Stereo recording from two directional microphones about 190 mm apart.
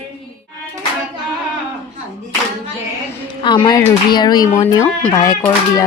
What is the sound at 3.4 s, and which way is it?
Speech, 25° left (ahead or behind).